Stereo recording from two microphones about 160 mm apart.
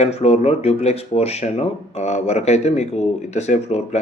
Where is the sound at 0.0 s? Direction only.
45° left (ahead or behind).